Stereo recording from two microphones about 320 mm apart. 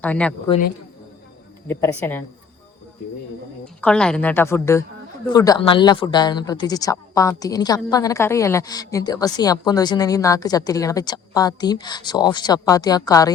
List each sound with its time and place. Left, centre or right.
0.0 s speech: centre
0.4 s a woman's voice: centre
1.6 s a woman's voice: centre
3.6 s a woman's voice: centre